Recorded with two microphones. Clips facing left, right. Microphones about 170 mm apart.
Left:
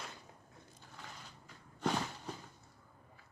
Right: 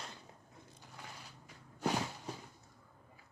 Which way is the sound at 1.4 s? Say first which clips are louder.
Even; 10° right (ahead or behind).